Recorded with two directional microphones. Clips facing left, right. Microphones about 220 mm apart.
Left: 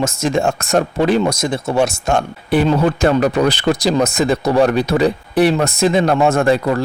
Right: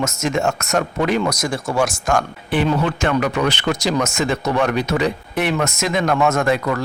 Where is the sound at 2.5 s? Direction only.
40° left (ahead or behind).